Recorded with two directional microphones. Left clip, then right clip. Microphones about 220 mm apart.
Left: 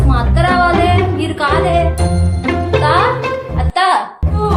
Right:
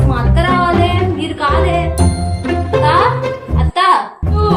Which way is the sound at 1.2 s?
20° left (ahead or behind).